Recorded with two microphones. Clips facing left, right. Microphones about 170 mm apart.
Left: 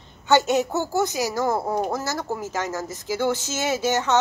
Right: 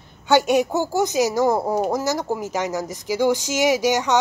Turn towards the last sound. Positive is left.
turn(degrees=-15)  # may be behind; listen again after turning